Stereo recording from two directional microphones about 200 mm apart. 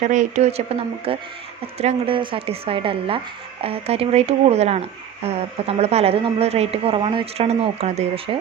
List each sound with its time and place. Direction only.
0.0 s a woman's voice: 35° right (ahead or behind)